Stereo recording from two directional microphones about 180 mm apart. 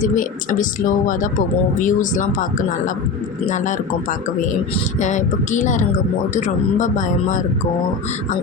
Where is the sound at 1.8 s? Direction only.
45° left (ahead or behind).